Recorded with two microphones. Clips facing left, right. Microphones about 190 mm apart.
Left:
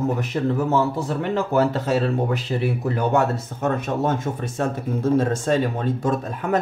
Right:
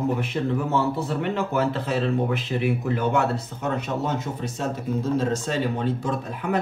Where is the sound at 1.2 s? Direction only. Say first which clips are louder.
Left 6 dB; 40° left (ahead or behind).